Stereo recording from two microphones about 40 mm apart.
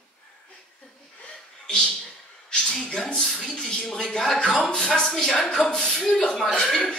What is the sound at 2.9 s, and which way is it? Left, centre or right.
A woman's voice, left.